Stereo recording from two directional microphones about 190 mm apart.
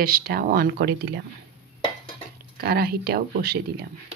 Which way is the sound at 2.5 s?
55° right (ahead or behind).